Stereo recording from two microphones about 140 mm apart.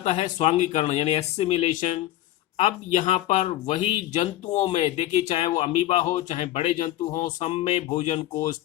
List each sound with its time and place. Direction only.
0.0 s a man's voice: 55° left (ahead or behind)